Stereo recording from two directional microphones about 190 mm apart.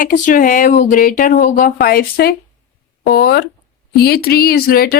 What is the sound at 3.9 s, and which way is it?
A woman's voice, 55° left (ahead or behind).